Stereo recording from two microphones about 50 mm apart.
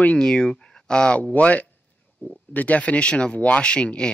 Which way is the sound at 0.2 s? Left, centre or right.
Centre.